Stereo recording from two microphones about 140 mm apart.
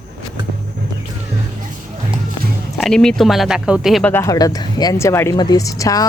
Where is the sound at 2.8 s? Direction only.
5° left (ahead or behind).